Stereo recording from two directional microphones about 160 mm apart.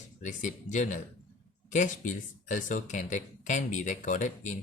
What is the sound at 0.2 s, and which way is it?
Speech, 50° left (ahead or behind).